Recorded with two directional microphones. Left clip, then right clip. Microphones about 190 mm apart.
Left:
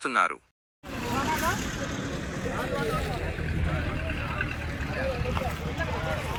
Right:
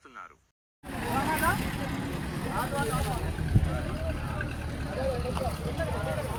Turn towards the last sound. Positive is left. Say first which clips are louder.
# left 1 dB
turn(degrees=-25)  # may be behind; listen again after turning